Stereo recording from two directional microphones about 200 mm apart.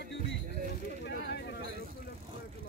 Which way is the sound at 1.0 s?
55° left (ahead or behind).